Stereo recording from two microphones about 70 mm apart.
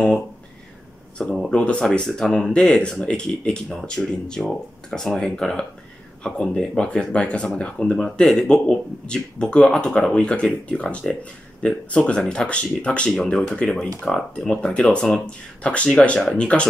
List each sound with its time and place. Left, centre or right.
1.1 s speech: centre